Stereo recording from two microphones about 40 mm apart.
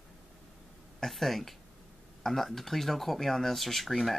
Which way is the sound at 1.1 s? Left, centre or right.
Centre.